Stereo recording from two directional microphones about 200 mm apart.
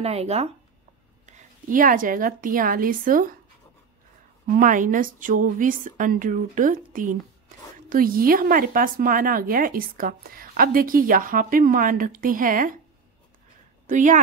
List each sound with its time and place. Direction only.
0.0 s a woman's voice: 30° right (ahead or behind)
4.6 s a woman's voice: 40° right (ahead or behind)
13.8 s a woman's voice: 40° right (ahead or behind)